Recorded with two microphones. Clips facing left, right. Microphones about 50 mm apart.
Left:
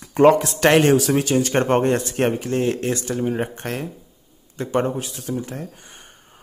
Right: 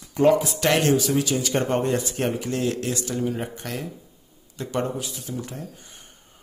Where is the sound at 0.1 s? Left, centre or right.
Left.